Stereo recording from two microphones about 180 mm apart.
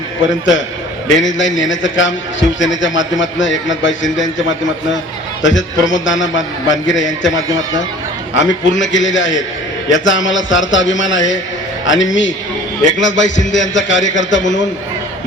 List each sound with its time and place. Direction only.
0.2 s a man's voice: 90° left